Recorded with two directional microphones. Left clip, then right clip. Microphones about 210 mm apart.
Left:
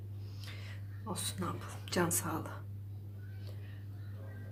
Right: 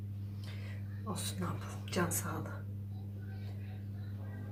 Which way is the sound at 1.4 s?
35° left (ahead or behind).